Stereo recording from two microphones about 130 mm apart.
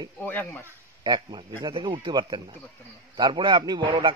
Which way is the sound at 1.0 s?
35° right (ahead or behind).